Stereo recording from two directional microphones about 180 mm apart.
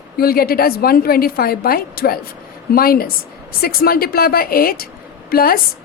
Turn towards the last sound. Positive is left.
turn(degrees=55)  # may be behind; listen again after turning